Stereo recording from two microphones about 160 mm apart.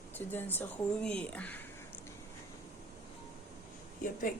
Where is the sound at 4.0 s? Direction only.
55° left (ahead or behind).